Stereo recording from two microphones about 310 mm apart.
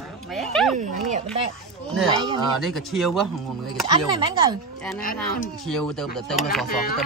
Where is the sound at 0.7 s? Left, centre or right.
Right.